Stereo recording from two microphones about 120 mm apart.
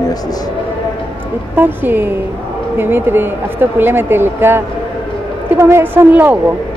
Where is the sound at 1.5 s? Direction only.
15° right (ahead or behind).